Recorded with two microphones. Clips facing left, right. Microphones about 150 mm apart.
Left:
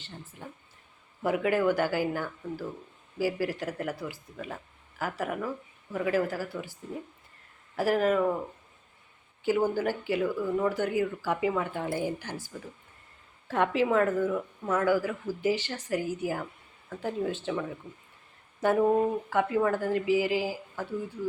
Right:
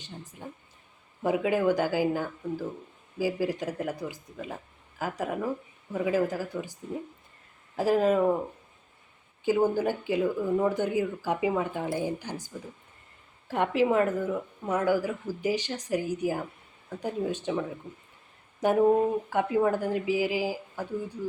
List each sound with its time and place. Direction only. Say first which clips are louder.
0.0 s a woman's voice: right 2 dB; 15° right (ahead or behind)
7.8 s speech: right 2 dB; 20° right (ahead or behind)
9.4 s speech: right 2 dB; 20° right (ahead or behind)
18.6 s speech: right 2 dB; 15° right (ahead or behind)